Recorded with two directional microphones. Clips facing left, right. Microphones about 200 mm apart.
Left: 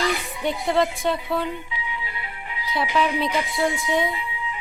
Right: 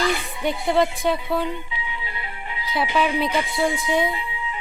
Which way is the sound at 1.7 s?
30° right (ahead or behind).